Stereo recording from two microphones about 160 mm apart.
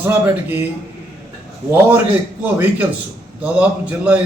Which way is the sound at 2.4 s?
10° right (ahead or behind).